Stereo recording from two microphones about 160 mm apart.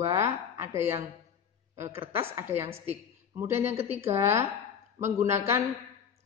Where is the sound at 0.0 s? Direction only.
20° right (ahead or behind).